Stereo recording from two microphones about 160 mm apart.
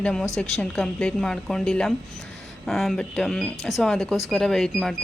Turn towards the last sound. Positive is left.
turn(degrees=0)  # may be behind; listen again after turning